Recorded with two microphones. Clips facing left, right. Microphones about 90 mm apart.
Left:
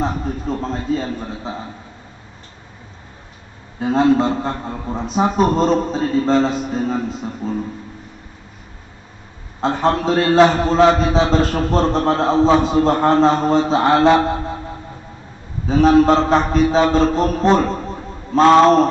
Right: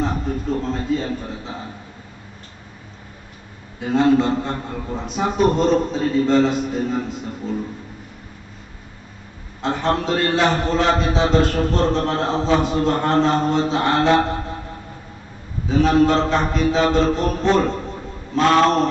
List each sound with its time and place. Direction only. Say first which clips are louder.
0.6 s a man's voice: left 1 dB; 35° left (ahead or behind)
3.8 s a man's voice: left 2 dB; 35° left (ahead or behind)
9.6 s a man's voice: left 3 dB; 35° left (ahead or behind)
15.7 s a man's voice: left 4 dB; 35° left (ahead or behind)